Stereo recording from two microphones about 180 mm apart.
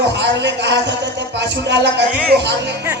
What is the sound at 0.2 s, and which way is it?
Sheep, 70° right (ahead or behind).